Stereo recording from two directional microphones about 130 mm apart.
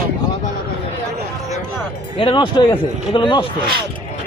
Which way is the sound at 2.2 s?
40° left (ahead or behind).